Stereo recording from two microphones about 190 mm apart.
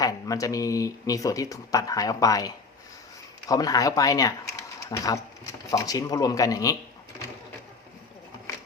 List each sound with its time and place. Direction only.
0.0 s speech: 20° left (ahead or behind)
3.5 s speech: 20° left (ahead or behind)